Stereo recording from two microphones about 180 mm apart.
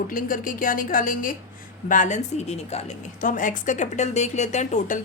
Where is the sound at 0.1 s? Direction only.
50° left (ahead or behind).